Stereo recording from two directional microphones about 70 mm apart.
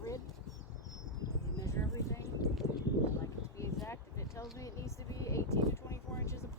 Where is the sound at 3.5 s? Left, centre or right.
Left.